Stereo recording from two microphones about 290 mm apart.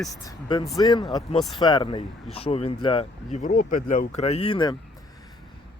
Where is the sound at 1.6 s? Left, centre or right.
Centre.